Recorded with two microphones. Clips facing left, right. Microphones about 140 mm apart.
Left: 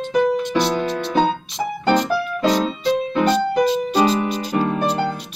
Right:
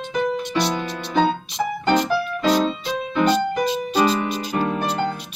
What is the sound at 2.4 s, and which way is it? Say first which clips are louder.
Music: left 2 dB; 5° right (ahead or behind).